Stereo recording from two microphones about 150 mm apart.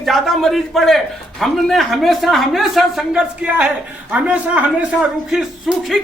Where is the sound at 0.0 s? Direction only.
Centre (ahead or behind).